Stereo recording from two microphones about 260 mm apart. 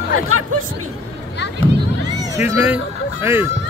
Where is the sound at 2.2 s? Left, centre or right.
Centre.